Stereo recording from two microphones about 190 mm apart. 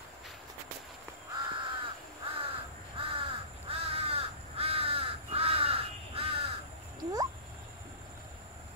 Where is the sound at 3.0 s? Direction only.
30° right (ahead or behind).